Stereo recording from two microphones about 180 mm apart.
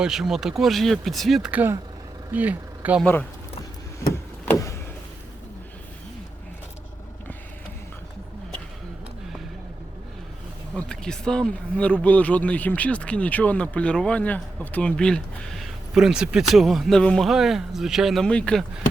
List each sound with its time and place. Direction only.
0.0 s speech: centre (ahead or behind)
3.0 s speech: 10° left (ahead or behind)
4.4 s vehicle: 15° left (ahead or behind)
10.8 s speech: 5° left (ahead or behind)